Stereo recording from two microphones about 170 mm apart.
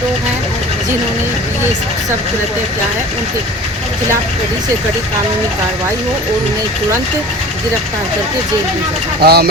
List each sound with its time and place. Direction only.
9.2 s speech: 70° right (ahead or behind)